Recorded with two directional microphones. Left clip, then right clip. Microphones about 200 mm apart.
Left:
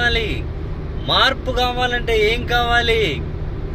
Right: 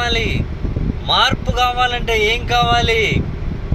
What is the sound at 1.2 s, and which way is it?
Speech, 10° left (ahead or behind).